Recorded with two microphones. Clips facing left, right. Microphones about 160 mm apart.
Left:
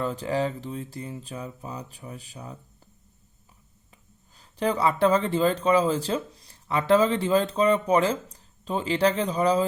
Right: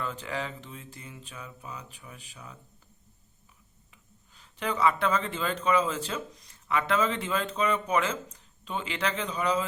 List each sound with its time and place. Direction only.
0.0 s speech: 35° left (ahead or behind)
3.9 s speech: 35° left (ahead or behind)